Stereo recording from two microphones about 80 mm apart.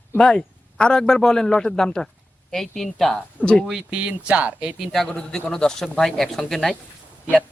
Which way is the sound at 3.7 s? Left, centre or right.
Centre.